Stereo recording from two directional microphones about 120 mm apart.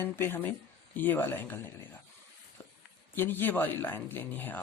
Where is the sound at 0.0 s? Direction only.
20° left (ahead or behind).